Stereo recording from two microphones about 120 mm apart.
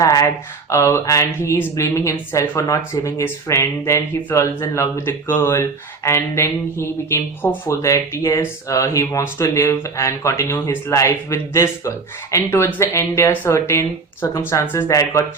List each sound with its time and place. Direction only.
0.0 s speech: 25° left (ahead or behind)